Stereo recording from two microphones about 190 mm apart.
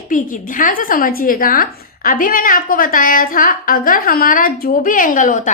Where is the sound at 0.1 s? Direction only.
45° left (ahead or behind).